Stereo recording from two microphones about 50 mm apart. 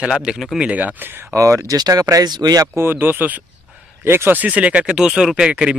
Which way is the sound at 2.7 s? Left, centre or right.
Right.